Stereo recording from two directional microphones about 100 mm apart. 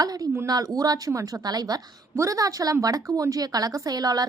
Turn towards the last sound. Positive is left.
turn(degrees=-40)  # may be behind; listen again after turning